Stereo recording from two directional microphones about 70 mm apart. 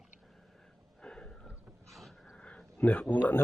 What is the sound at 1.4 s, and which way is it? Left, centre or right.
Wild animals, centre.